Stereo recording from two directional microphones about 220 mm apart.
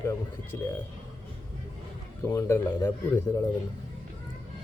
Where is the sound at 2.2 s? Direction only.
10° left (ahead or behind).